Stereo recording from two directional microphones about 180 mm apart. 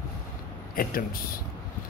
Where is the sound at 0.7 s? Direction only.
55° left (ahead or behind).